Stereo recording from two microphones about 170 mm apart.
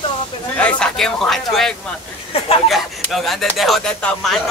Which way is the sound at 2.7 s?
Centre (ahead or behind).